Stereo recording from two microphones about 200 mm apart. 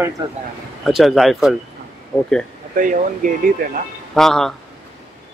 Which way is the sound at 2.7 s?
45° right (ahead or behind).